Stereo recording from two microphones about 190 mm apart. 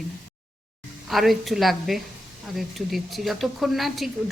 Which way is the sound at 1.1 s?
Centre (ahead or behind).